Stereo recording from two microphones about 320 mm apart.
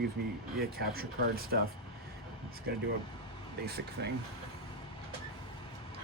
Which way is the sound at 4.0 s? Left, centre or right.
Right.